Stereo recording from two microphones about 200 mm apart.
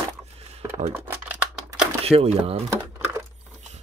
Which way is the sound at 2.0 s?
30° right (ahead or behind).